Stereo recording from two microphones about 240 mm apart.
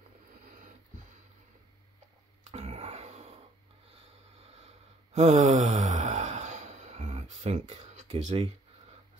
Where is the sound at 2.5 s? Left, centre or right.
Right.